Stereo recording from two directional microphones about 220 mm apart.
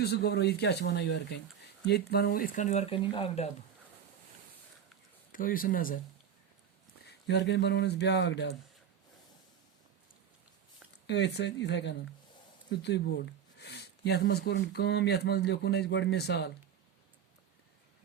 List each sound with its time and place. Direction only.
0.0 s speech: 45° left (ahead or behind); by 3.5 s 25° left (ahead or behind)
5.3 s speech: 40° left (ahead or behind)
7.3 s speech: 50° left (ahead or behind)
11.0 s speech: 50° left (ahead or behind)